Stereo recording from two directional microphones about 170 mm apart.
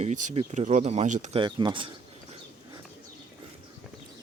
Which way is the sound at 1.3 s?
30° right (ahead or behind).